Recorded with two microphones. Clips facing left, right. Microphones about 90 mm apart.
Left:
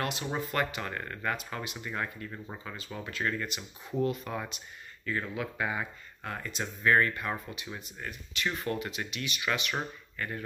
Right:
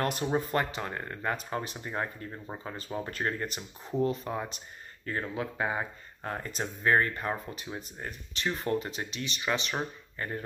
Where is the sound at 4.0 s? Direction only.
25° right (ahead or behind).